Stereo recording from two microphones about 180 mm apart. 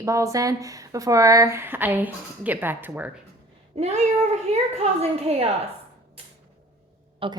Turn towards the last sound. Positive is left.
turn(degrees=-30)  # may be behind; listen again after turning